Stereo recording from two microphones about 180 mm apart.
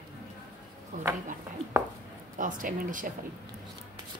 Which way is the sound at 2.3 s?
45° right (ahead or behind).